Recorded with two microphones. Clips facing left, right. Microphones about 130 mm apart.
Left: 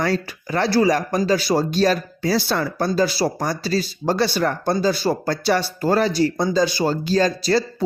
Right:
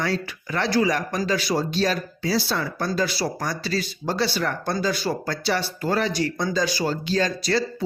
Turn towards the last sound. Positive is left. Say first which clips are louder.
# left 4 dB
turn(degrees=40)  # may be behind; listen again after turning